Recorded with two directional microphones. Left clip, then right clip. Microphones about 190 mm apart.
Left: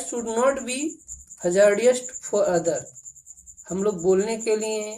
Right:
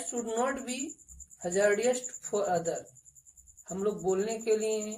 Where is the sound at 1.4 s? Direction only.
40° left (ahead or behind).